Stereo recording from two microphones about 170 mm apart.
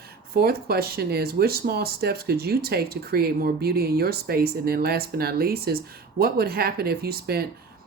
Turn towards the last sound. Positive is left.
turn(degrees=-65)  # may be behind; listen again after turning